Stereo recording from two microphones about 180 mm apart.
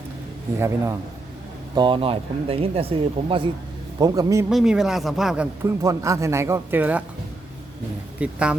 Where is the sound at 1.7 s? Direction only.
25° right (ahead or behind).